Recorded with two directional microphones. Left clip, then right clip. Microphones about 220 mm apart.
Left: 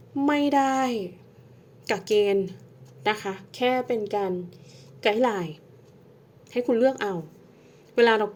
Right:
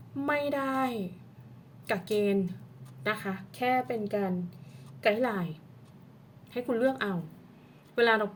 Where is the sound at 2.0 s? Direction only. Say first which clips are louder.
Left 8 dB; 35° left (ahead or behind).